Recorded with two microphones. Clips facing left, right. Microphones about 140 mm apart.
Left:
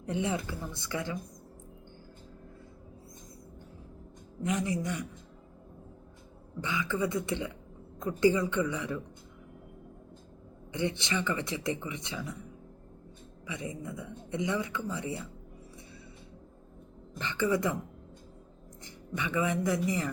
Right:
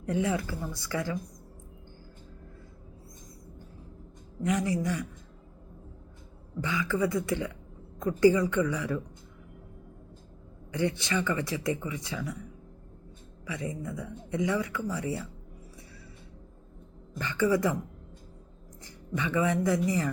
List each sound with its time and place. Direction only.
0.0 s speech: 25° left (ahead or behind)
4.4 s speech: 20° left (ahead or behind)
6.6 s speech: 20° left (ahead or behind)
10.7 s speech: 20° left (ahead or behind)
13.5 s speech: 20° left (ahead or behind)
17.2 s speech: 20° left (ahead or behind)
19.1 s speech: 20° left (ahead or behind)